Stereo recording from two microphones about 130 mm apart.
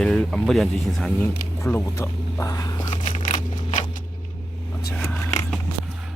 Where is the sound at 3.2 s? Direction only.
85° left.